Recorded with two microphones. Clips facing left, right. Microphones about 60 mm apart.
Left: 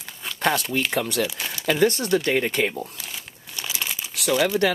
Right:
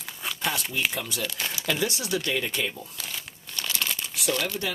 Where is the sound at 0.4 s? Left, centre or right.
Left.